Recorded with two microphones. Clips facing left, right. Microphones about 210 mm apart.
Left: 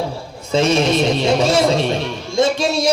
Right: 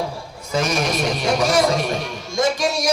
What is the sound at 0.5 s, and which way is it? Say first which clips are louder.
A man's voice: left 6 dB; 25° left (ahead or behind).